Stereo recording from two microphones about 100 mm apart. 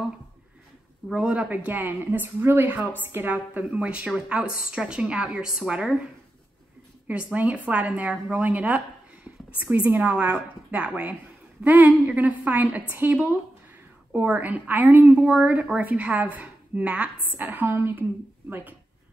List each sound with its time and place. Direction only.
1.1 s a woman's voice: 10° right (ahead or behind)
7.1 s a woman's voice: 15° right (ahead or behind)